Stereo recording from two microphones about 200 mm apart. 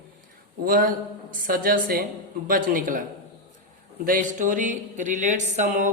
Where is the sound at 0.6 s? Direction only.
45° right (ahead or behind).